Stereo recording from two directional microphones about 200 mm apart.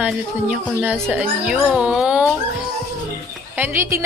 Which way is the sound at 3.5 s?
10° right (ahead or behind).